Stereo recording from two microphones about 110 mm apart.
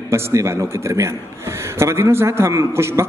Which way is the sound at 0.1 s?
25° right (ahead or behind).